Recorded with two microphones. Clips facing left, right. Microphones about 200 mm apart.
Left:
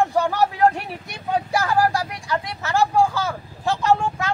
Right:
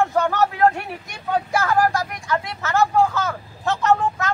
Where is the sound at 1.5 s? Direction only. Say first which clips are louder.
Right 1 dB; 15° left (ahead or behind).